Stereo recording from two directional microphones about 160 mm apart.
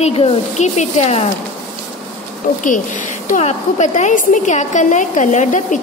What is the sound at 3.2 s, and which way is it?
A woman's voice, 45° left (ahead or behind).